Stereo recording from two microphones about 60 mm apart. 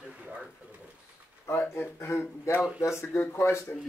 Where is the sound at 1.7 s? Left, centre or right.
Left.